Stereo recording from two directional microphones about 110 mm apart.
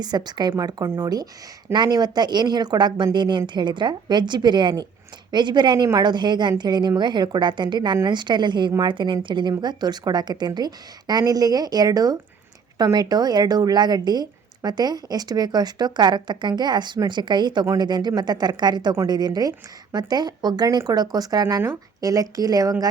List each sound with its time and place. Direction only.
0.0 s a woman's voice: 40° right (ahead or behind)